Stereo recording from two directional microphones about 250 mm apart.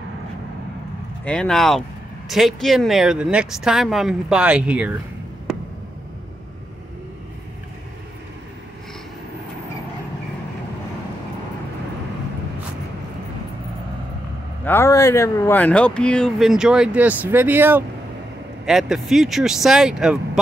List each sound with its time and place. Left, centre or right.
1.2 s speech: centre
14.6 s speech: centre